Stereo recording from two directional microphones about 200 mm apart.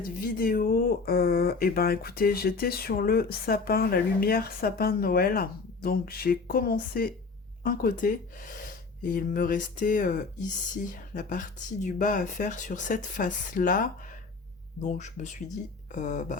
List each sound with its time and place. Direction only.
0.3 s speech: 45° left (ahead or behind)